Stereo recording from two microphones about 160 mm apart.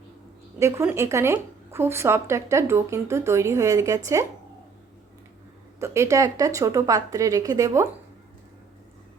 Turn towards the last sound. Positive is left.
turn(degrees=-20)  # may be behind; listen again after turning